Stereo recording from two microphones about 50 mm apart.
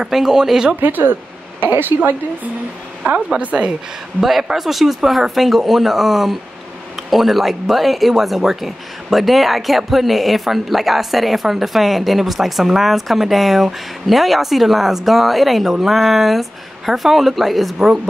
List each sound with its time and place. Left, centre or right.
0.0 s speech: centre
0.7 s a woman's voice: right
3.3 s a woman's voice: right
4.2 s speech: centre